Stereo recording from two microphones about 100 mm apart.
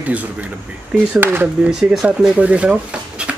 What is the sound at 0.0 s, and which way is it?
Speech, 15° right (ahead or behind).